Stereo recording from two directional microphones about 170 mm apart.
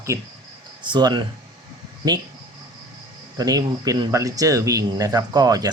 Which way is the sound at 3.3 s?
20° right (ahead or behind).